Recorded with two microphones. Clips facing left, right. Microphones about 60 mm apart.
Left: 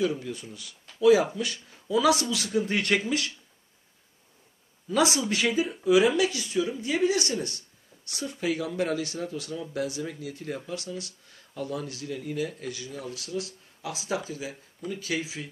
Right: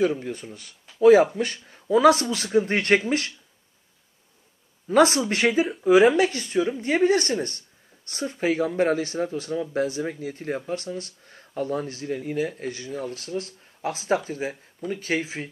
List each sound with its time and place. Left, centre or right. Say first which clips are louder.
0.0 s speech: right 4 dB; right
4.8 s speech: right 6 dB; right
5.4 s speech: right 5 dB; right